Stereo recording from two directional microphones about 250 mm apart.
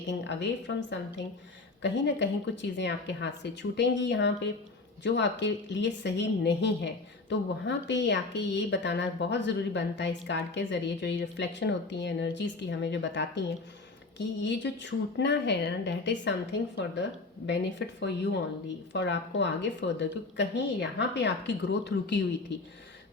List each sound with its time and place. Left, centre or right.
0.1 s speech: left